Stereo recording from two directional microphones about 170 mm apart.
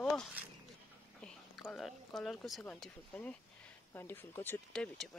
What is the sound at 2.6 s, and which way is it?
Speech, 5° left (ahead or behind).